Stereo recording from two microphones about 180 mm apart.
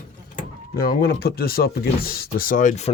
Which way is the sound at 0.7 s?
55° left (ahead or behind).